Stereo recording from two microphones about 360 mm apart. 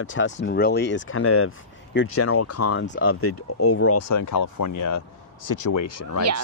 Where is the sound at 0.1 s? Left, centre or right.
Left.